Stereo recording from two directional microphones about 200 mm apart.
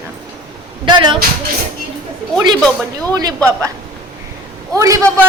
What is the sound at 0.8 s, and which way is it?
Speech, 25° right (ahead or behind).